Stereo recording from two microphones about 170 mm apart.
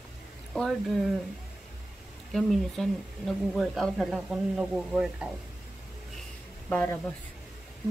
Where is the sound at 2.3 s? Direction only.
Centre (ahead or behind).